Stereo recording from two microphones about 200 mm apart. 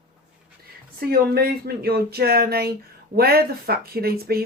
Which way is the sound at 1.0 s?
50° right (ahead or behind).